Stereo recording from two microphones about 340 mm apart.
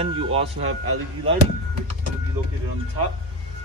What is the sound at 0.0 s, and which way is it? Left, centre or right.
Speech, centre.